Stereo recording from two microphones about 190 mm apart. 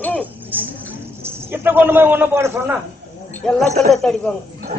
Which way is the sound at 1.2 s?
10° right (ahead or behind).